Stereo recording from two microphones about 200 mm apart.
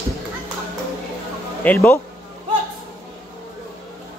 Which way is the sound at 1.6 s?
10° left (ahead or behind).